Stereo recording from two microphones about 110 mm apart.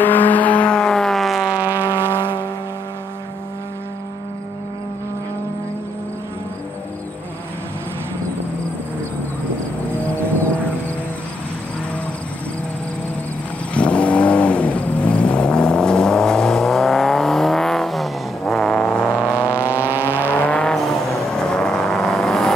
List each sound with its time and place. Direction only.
0.0 s vehicle: 15° left (ahead or behind); by 1.6 s centre (ahead or behind)
1.6 s vehicle: 15° right (ahead or behind)
13.7 s vehicle: 10° left (ahead or behind)
19.5 s vehicle: 15° right (ahead or behind)
20.4 s vehicle: 10° left (ahead or behind)